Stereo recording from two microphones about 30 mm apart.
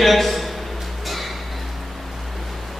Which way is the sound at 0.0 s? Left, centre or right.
Centre.